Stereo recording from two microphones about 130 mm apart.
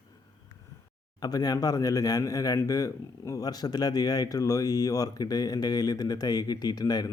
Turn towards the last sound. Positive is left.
turn(degrees=30)  # may be behind; listen again after turning